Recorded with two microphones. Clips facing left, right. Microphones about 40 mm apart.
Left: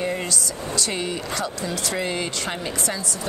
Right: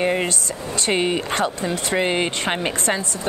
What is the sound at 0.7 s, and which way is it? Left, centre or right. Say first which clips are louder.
Speech: right 7 dB; right.